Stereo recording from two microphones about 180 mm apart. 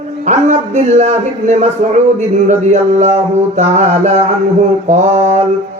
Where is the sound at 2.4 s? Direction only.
40° right (ahead or behind).